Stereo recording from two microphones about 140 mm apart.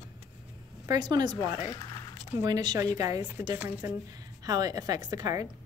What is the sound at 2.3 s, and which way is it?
Speech, 25° right (ahead or behind).